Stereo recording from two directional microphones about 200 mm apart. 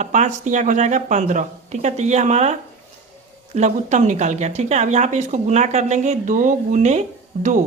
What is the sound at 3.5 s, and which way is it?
Speech, 35° right (ahead or behind).